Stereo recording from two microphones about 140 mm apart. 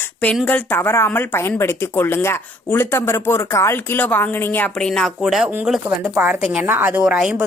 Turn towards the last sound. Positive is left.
turn(degrees=-5)  # may be behind; listen again after turning